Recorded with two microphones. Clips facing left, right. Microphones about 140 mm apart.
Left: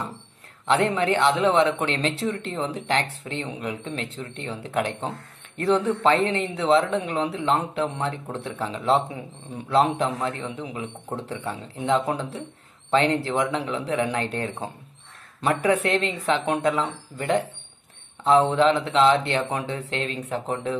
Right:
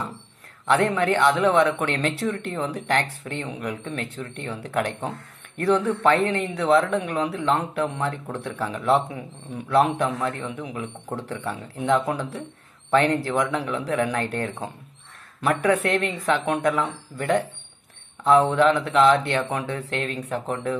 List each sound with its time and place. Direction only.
0.7 s speech: 25° left (ahead or behind)